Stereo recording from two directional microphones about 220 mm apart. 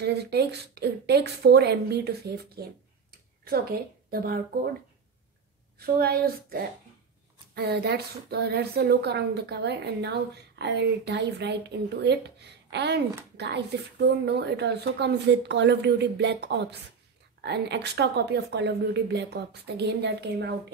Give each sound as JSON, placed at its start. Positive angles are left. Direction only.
{"t": 0.0, "sound": "a woman's voice", "side_deg": -50}
{"t": 3.1, "sound": "a sound", "side_deg": -45}
{"t": 5.8, "sound": "a woman's voice", "side_deg": -45}